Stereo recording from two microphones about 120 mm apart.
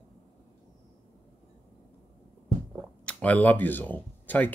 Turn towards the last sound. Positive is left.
turn(degrees=15)  # may be behind; listen again after turning